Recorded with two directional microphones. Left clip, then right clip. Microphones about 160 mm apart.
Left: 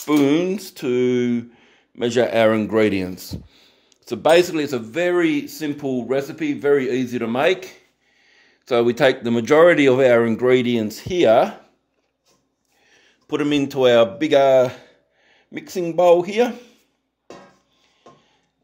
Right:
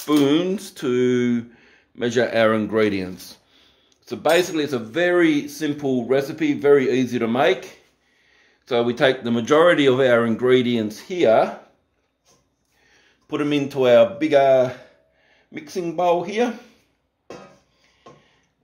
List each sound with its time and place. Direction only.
0.0 s speech: 35° left (ahead or behind); by 7.4 s 20° left (ahead or behind)
7.6 s speech: 55° left (ahead or behind)
12.8 s speech: 70° left (ahead or behind)